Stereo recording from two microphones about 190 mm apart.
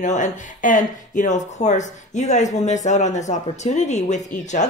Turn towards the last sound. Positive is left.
turn(degrees=40)  # may be behind; listen again after turning